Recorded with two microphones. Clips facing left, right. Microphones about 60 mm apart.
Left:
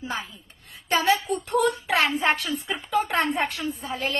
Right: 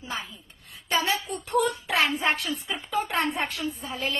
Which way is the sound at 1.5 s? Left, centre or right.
Left.